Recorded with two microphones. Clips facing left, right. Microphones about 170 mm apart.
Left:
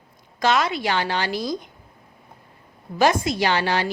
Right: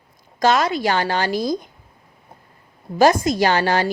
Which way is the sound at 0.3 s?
40° right (ahead or behind).